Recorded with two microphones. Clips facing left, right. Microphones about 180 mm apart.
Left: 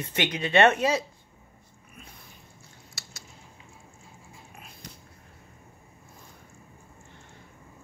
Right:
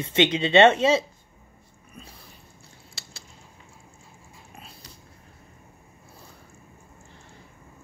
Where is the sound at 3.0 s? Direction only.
30° right (ahead or behind).